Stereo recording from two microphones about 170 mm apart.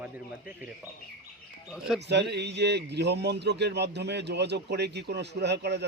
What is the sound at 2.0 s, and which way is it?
A man's voice, 80° right.